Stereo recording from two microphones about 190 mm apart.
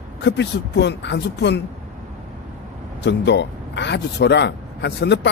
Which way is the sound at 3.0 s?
65° left (ahead or behind).